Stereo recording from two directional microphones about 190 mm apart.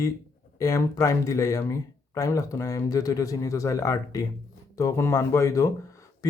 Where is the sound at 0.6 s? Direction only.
15° left (ahead or behind).